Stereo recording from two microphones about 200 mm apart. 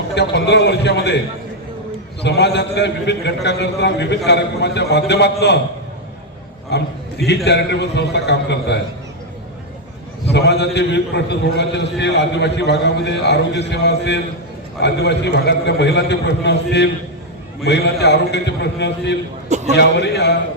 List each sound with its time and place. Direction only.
0.1 s a man's voice: 60° left (ahead or behind)
2.2 s a man's voice: 55° left (ahead or behind)
6.7 s a man's voice: 55° left (ahead or behind)
10.3 s a man's voice: 55° left (ahead or behind)
19.5 s a sound: 35° right (ahead or behind)
19.7 s a man's voice: 60° left (ahead or behind)